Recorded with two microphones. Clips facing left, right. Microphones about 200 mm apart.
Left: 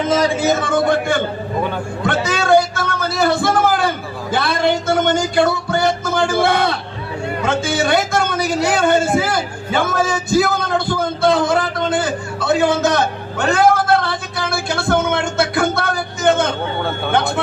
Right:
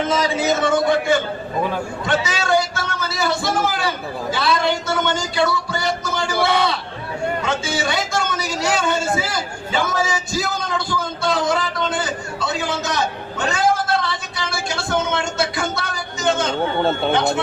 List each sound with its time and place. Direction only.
0.1 s a man's voice: 45° left (ahead or behind)
2.0 s cat: 55° left (ahead or behind)
7.4 s a sound: 55° left (ahead or behind)
17.1 s speech: 55° left (ahead or behind)